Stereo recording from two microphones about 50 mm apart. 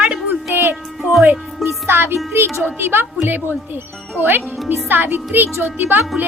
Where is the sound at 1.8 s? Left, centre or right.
Right.